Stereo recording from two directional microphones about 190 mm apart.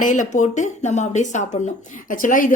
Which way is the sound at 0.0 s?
40° left (ahead or behind).